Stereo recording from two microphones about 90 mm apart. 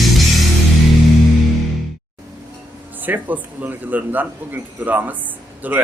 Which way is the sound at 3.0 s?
20° right (ahead or behind).